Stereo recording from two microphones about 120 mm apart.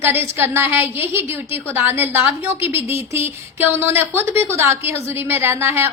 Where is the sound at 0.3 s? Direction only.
20° right (ahead or behind).